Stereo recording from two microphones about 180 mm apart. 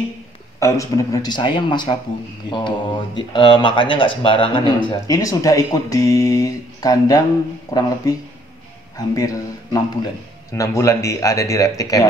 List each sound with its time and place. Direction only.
0.6 s speech: 15° left (ahead or behind)